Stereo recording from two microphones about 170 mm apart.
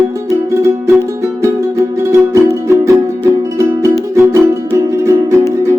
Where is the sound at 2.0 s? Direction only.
15° right (ahead or behind).